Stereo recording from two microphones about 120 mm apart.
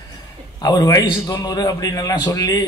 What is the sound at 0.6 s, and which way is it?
A man's voice, 35° left (ahead or behind).